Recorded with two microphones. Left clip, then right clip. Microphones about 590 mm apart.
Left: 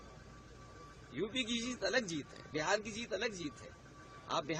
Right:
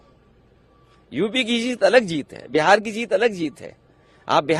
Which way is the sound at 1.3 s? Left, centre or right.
Right.